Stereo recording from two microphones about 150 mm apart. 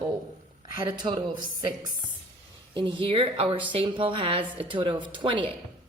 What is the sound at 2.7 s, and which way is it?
A woman's voice, 35° right (ahead or behind).